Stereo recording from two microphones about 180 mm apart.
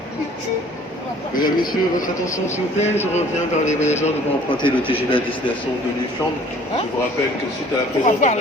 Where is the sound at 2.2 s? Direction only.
15° left (ahead or behind).